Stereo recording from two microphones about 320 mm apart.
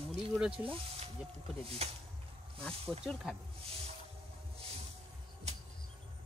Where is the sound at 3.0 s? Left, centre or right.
Centre.